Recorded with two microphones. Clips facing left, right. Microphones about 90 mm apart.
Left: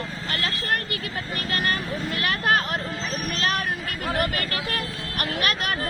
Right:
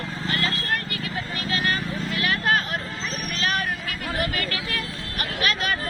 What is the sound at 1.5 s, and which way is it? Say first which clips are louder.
Vehicle: even; 50° left (ahead or behind).